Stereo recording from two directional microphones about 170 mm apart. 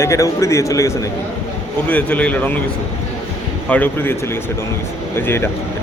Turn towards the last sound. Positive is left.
turn(degrees=15)  # may be behind; listen again after turning